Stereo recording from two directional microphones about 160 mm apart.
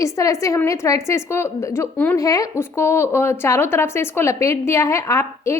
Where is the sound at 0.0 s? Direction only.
20° left (ahead or behind).